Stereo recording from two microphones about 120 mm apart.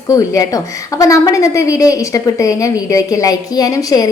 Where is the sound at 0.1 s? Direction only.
30° left (ahead or behind).